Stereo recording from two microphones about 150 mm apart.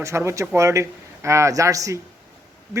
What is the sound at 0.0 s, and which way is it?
A man's voice, 20° right (ahead or behind).